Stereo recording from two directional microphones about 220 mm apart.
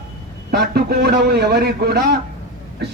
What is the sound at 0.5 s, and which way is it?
A man's voice, 45° right (ahead or behind).